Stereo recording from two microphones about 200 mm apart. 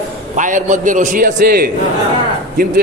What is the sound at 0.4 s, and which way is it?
A man's voice, 40° right (ahead or behind).